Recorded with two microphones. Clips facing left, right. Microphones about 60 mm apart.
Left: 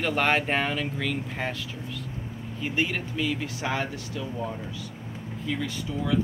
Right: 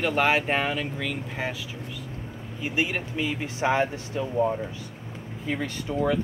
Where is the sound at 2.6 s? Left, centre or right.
Centre.